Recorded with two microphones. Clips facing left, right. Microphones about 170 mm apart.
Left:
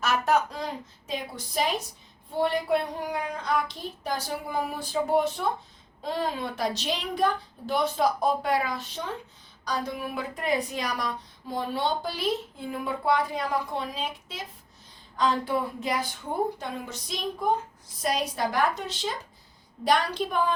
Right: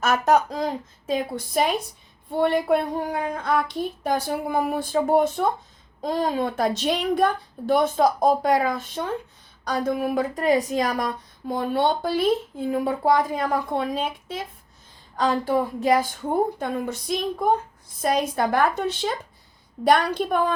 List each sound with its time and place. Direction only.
0.0 s a woman's voice: 45° right (ahead or behind)
6.0 s a woman's voice: 40° right (ahead or behind)
15.1 s a woman's voice: 40° right (ahead or behind)
16.6 s a woman's voice: 55° right (ahead or behind)